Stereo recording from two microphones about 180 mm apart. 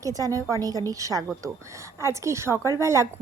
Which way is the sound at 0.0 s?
20° right (ahead or behind).